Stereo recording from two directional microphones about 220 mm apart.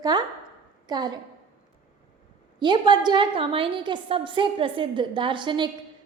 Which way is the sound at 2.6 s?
20° right (ahead or behind).